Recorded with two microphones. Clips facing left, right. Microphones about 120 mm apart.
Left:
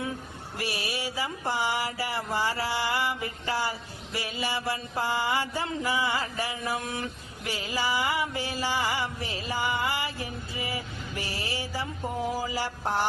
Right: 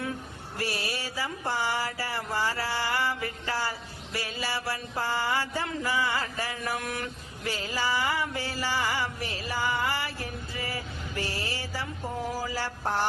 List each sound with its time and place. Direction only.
0.6 s mantra: 15° left (ahead or behind)